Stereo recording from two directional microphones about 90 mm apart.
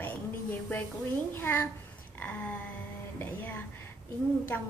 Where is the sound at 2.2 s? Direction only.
15° left (ahead or behind).